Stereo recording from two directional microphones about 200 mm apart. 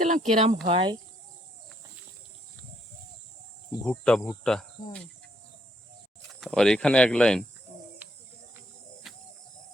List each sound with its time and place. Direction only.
0.0 s speech: 40° right (ahead or behind)
3.8 s speech: 5° left (ahead or behind)
6.4 s speech: 5° left (ahead or behind)
8.0 s cricket: 10° right (ahead or behind)
9.0 s bird: centre (ahead or behind)